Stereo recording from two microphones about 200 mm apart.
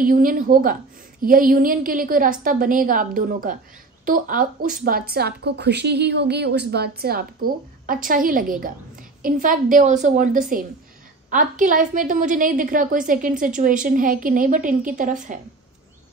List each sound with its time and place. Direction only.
0.0 s a woman's voice: 45° right (ahead or behind)